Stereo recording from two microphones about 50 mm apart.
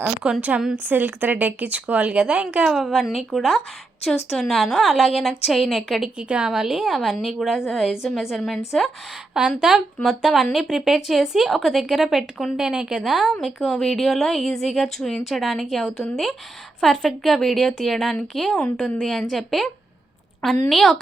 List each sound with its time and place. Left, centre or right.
0.2 s a woman's voice: right
0.9 s speech: right
2.6 s a woman's voice: centre
6.1 s a woman's voice: centre
8.4 s speech: centre
9.3 s a woman's voice: centre
13.1 s a woman's voice: centre
13.4 s a woman's voice: centre